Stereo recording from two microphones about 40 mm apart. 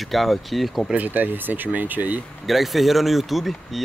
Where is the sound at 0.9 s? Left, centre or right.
Right.